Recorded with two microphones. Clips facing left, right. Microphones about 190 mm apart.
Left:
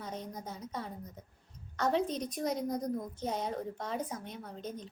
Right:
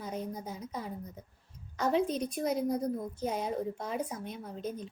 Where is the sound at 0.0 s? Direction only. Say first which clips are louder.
Right 4 dB; 10° right (ahead or behind).